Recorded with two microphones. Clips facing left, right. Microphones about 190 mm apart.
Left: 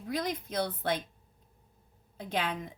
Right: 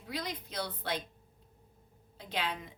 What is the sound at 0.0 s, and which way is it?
A woman's voice, 50° left (ahead or behind).